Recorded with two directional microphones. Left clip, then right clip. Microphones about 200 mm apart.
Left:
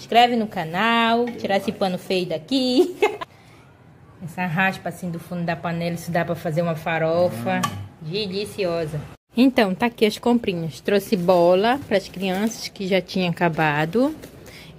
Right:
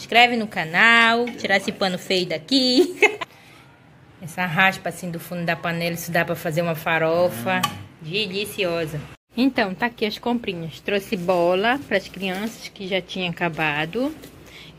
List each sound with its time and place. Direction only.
0.0 s a woman's voice: 10° left (ahead or behind)
4.4 s a woman's voice: 10° right (ahead or behind)
9.3 s speech: 25° left (ahead or behind)
12.6 s a woman's voice: 90° left
13.2 s speech: 25° left (ahead or behind)